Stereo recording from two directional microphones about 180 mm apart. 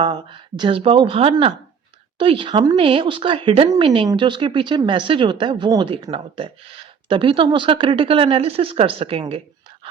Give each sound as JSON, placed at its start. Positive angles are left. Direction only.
{"t": 0.0, "sound": "speech", "side_deg": -25}